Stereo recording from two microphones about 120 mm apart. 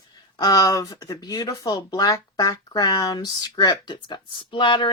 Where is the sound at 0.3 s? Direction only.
30° left (ahead or behind).